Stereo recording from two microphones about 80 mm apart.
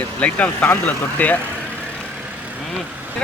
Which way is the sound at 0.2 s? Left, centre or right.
Centre.